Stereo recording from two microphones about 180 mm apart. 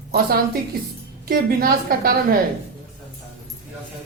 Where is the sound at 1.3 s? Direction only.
55° right (ahead or behind).